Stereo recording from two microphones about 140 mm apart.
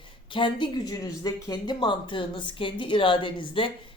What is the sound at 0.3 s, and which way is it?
Speech, 35° left (ahead or behind).